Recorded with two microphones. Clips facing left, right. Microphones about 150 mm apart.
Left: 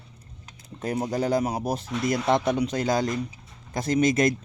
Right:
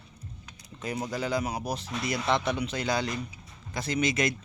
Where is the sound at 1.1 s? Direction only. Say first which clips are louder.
Left 6 dB; 45° left (ahead or behind).